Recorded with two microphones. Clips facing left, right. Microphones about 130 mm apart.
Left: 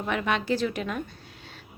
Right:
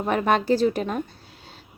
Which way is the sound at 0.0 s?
40° right (ahead or behind).